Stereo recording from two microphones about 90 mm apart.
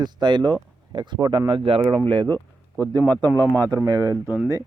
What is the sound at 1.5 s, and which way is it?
Speech, 80° right.